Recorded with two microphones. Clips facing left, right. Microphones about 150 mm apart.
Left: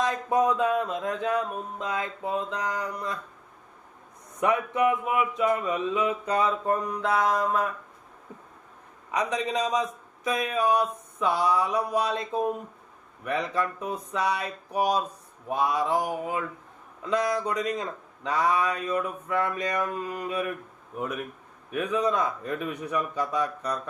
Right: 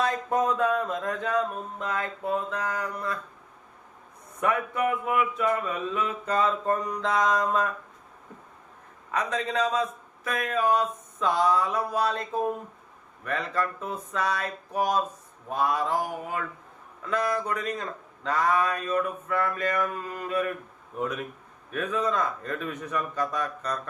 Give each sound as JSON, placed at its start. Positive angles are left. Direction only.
{"t": 0.0, "sound": "speech", "side_deg": 10}
{"t": 4.4, "sound": "speech", "side_deg": 20}
{"t": 9.1, "sound": "speech", "side_deg": 15}